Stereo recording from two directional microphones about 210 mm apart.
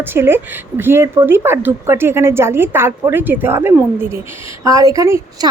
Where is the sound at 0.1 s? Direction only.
10° right (ahead or behind).